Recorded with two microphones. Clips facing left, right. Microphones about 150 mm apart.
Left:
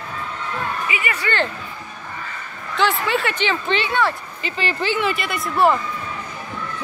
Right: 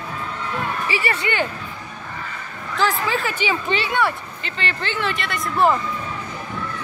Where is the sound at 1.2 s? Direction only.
10° right (ahead or behind).